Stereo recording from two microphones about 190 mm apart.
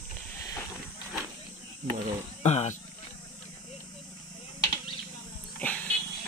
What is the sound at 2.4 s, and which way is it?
Wild animals, 35° left (ahead or behind).